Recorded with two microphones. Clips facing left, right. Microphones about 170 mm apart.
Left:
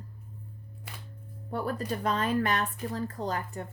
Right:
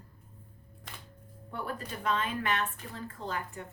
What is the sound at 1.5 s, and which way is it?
Speech, 40° left (ahead or behind).